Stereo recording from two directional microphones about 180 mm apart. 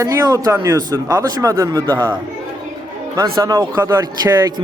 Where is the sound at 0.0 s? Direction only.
20° right (ahead or behind).